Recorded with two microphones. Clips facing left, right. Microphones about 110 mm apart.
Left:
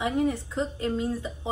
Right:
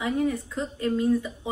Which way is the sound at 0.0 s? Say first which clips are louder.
Even; 25° left (ahead or behind).